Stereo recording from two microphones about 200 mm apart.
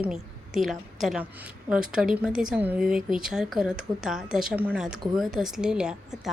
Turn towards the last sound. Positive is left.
turn(degrees=-5)  # may be behind; listen again after turning